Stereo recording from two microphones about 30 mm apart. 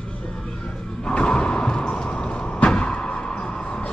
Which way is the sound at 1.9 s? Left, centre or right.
Left.